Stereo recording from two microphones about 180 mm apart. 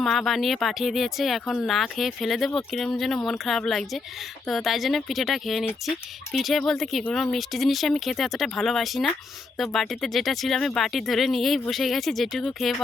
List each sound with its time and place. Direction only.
0.0 s speech: centre (ahead or behind)